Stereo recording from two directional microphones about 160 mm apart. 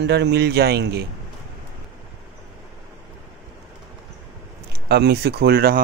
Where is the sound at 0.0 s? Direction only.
90° right.